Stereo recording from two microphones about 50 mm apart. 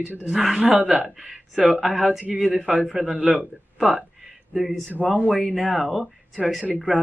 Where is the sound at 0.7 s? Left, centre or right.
Right.